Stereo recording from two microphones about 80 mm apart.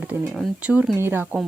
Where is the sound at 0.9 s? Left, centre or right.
Right.